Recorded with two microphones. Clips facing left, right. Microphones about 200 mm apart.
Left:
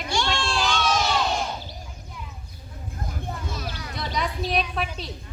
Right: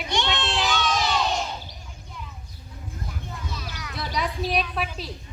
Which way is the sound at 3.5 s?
50° left (ahead or behind).